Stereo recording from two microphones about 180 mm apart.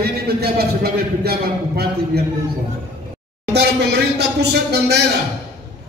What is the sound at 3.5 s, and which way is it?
Speech, 70° right (ahead or behind).